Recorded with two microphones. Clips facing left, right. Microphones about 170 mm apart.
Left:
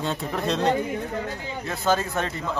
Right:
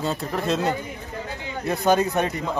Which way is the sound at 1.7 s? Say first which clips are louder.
Right 4 dB; 15° right (ahead or behind).